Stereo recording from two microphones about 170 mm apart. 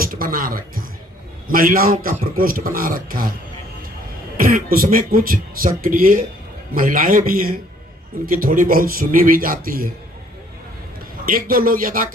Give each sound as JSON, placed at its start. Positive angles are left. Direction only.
{"t": 0.0, "sound": "a sound", "side_deg": -60}
{"t": 1.5, "sound": "speech", "side_deg": -55}
{"t": 4.4, "sound": "speech", "side_deg": -55}
{"t": 11.3, "sound": "speech", "side_deg": -55}